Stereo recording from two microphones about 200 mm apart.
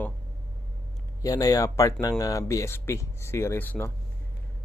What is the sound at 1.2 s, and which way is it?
Speech, 15° left (ahead or behind).